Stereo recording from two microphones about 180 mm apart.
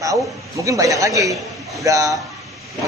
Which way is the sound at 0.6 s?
20° right (ahead or behind).